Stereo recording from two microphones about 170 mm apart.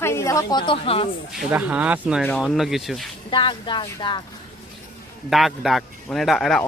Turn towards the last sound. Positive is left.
turn(degrees=0)  # may be behind; listen again after turning